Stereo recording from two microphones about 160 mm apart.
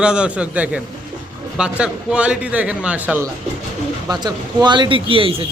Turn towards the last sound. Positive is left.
turn(degrees=-35)  # may be behind; listen again after turning